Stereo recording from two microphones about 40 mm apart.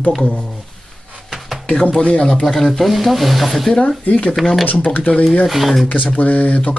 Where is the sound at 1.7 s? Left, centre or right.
Left.